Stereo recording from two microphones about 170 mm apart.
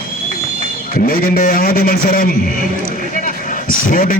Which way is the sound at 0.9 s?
60° left (ahead or behind).